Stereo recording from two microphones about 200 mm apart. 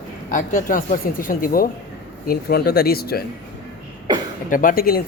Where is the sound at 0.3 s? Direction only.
40° left (ahead or behind).